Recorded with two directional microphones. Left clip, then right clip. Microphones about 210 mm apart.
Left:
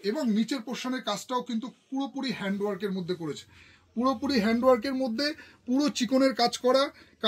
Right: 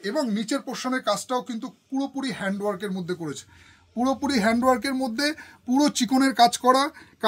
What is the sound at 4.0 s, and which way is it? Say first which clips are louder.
Speech: right 3 dB; 50° right (ahead or behind).